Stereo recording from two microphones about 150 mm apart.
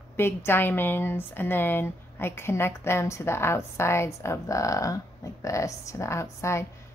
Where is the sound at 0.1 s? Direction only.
15° left (ahead or behind).